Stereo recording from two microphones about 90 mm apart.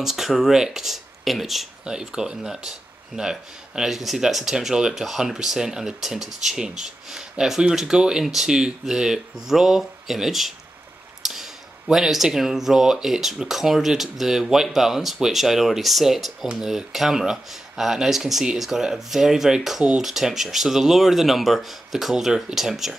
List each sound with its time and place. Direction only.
0.0 s speech: 5° right (ahead or behind)
11.2 s clicking: 5° right (ahead or behind)
11.9 s speech: 5° right (ahead or behind)